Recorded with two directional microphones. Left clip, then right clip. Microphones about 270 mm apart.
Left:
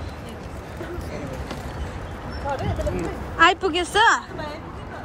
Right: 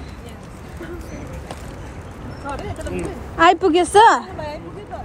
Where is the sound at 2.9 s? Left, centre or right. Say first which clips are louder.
Right 1 dB; centre.